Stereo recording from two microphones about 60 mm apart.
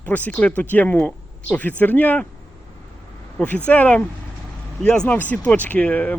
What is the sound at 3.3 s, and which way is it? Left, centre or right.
Speech, left.